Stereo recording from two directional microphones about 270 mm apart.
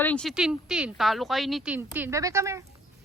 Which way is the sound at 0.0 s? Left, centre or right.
Centre.